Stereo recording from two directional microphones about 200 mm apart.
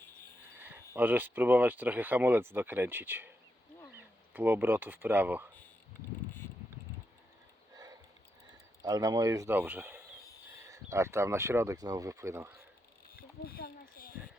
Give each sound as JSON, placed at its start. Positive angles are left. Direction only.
{"t": 0.9, "sound": "speech", "side_deg": -10}
{"t": 8.8, "sound": "speech", "side_deg": -20}
{"t": 13.1, "sound": "a sound", "side_deg": 50}